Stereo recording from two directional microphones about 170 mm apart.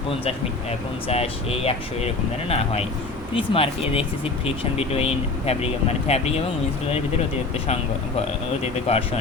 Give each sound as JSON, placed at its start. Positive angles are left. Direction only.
{"t": 1.0, "sound": "speech", "side_deg": 35}
{"t": 3.3, "sound": "speech", "side_deg": 35}
{"t": 8.9, "sound": "speech", "side_deg": 35}